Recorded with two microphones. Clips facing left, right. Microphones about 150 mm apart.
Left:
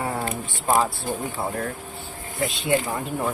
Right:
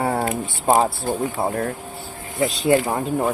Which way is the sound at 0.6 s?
40° right (ahead or behind).